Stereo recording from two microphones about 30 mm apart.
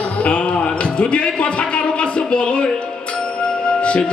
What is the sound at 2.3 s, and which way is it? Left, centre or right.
Speech, left.